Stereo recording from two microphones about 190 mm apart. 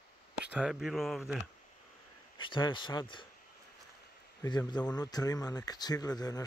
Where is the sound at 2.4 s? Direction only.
25° left (ahead or behind).